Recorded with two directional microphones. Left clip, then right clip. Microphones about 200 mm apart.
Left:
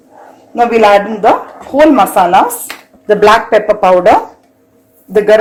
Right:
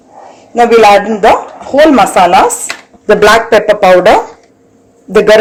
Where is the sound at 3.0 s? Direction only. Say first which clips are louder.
Right 2 dB; 25° right (ahead or behind).